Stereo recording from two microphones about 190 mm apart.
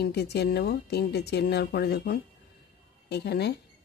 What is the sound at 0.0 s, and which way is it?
Speech, 60° left (ahead or behind).